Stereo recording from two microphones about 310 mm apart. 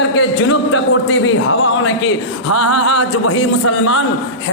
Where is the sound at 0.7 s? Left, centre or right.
Left.